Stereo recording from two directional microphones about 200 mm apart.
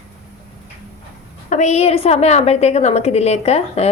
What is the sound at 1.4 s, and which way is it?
A woman's voice, 35° left (ahead or behind).